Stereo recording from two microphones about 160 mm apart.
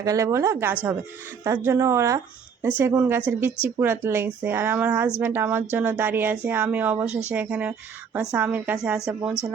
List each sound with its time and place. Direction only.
0.0 s a woman's voice: 20° right (ahead or behind)